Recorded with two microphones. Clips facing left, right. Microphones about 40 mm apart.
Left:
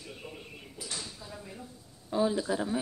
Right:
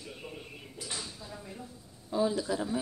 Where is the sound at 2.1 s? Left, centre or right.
Left.